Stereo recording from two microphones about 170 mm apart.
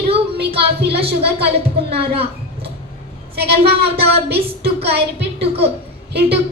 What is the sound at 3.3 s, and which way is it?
Speech, 70° right (ahead or behind).